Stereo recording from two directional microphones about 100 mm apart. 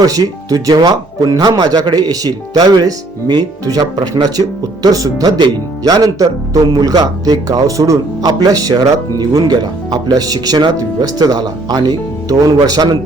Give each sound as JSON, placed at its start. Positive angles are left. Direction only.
{"t": 0.0, "sound": "speech", "side_deg": -40}